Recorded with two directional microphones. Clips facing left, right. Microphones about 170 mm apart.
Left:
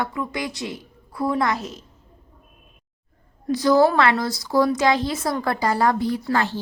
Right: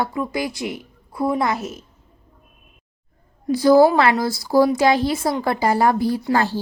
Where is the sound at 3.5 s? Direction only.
30° right (ahead or behind).